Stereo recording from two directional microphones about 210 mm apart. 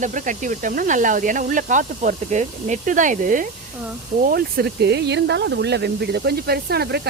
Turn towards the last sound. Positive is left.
turn(degrees=-50)  # may be behind; listen again after turning